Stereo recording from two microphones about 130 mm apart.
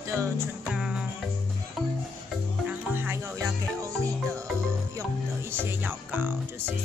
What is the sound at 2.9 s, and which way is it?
Music, 15° right (ahead or behind).